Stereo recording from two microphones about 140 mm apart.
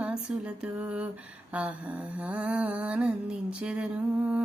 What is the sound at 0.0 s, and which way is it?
Humming, 5° right (ahead or behind).